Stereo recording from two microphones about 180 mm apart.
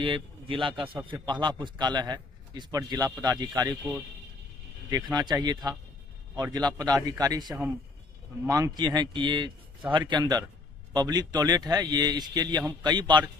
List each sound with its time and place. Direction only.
0.0 s a man's voice: 30° right (ahead or behind)
7.4 s speech: 10° right (ahead or behind)
8.5 s a man's voice: 20° right (ahead or behind)